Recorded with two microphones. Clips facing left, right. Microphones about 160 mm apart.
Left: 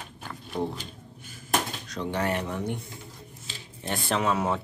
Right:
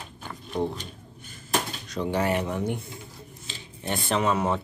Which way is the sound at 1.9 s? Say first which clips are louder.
Right 4 dB; 10° right (ahead or behind).